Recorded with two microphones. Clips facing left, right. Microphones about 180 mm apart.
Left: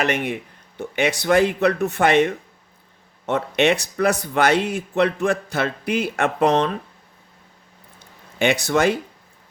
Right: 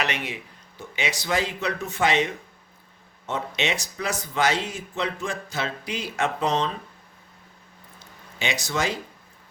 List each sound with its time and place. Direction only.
0.0 s speech: 50° left (ahead or behind)
8.4 s speech: 60° left (ahead or behind)